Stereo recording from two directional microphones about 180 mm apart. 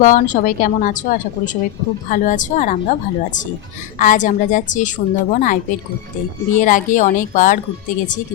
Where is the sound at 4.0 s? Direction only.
45° left (ahead or behind).